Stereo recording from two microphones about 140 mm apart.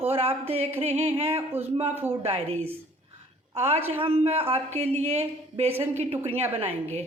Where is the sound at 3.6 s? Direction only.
50° right (ahead or behind).